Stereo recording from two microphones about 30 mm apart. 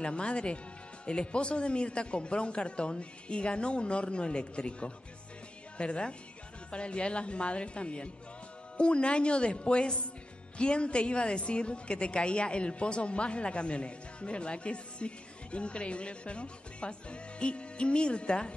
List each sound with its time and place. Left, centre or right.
0.0 s a woman's voice: left